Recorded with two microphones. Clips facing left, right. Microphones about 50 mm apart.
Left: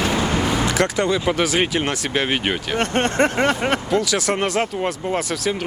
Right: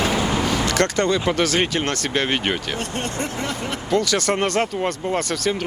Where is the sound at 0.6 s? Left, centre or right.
Centre.